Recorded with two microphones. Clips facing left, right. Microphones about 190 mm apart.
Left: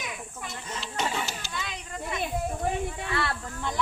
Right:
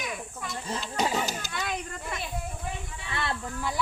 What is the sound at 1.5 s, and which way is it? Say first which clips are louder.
Children playing: right 3 dB; 50° right (ahead or behind).